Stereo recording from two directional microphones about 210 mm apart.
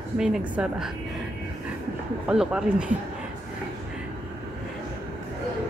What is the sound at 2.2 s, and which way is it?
Speech, 5° right (ahead or behind).